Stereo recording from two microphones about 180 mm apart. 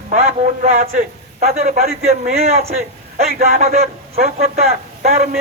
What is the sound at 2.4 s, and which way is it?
Speech, 35° right (ahead or behind).